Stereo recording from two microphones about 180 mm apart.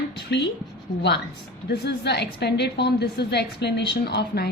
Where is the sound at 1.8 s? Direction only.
70° left (ahead or behind).